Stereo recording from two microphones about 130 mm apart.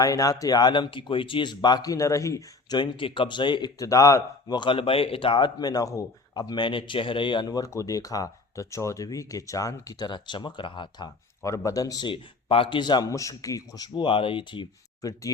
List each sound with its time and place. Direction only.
0.0 s a man's voice: 25° left (ahead or behind)
2.7 s a man's voice: 40° left (ahead or behind)
11.4 s a man's voice: 25° left (ahead or behind); by 14.7 s 40° left (ahead or behind)
15.0 s speech: 25° left (ahead or behind)